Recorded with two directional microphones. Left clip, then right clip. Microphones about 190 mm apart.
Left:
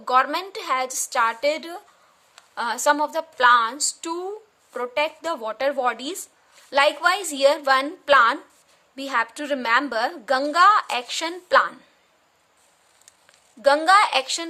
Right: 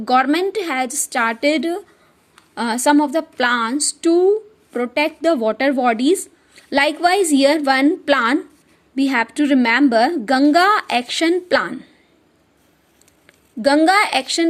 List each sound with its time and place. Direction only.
0.0 s speech: 15° right (ahead or behind)
13.2 s a woman's voice: 15° right (ahead or behind)